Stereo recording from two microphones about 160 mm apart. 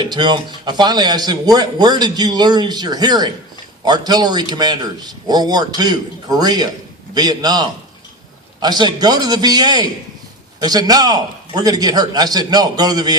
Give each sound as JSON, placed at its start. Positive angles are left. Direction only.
{"t": 0.0, "sound": "a man's voice", "side_deg": -25}